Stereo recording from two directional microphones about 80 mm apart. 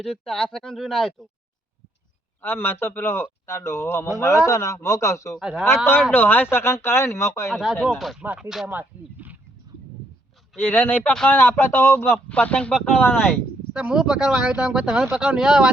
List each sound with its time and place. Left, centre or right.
0.0 s speech: centre
2.4 s a man's voice: left
5.4 s speech: centre
5.6 s speech: left
7.5 s speech: centre
8.7 s speech: right
10.6 s a man's voice: left
12.3 s speech: centre
13.1 s speech: centre